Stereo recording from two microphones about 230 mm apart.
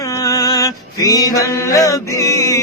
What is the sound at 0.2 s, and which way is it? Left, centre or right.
Mantra, centre.